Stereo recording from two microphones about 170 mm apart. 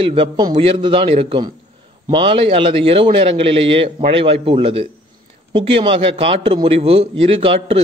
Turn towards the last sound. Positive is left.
turn(degrees=-35)  # may be behind; listen again after turning